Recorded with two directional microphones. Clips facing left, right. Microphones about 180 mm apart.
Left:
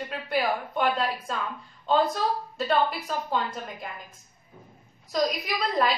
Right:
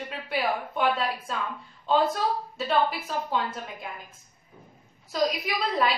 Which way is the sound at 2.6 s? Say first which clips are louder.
Left 1 dB; centre (ahead or behind).